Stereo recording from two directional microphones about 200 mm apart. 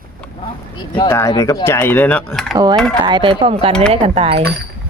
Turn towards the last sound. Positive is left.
turn(degrees=-30)  # may be behind; listen again after turning